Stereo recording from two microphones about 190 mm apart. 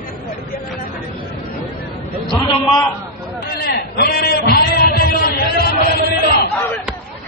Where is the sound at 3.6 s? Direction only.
55° left (ahead or behind).